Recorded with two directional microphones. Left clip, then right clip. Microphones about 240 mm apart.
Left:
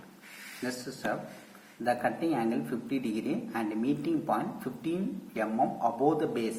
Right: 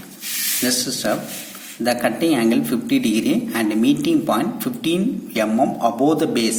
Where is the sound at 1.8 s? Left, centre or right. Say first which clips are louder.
Right 10 dB; right.